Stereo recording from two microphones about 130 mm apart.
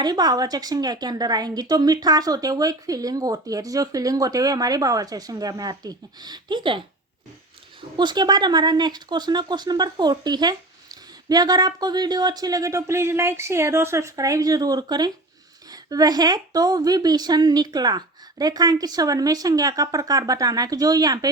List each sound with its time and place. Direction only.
0.0 s a woman's voice: 30° right (ahead or behind)
7.9 s a woman's voice: 35° right (ahead or behind)